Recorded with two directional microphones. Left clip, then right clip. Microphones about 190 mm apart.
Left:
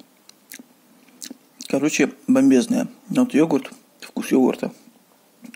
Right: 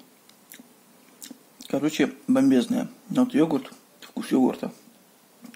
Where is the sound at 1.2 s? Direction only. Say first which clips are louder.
Left 7 dB; 30° left (ahead or behind).